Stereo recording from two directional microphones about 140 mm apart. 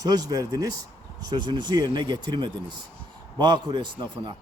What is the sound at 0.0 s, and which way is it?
A man's voice, 30° right (ahead or behind).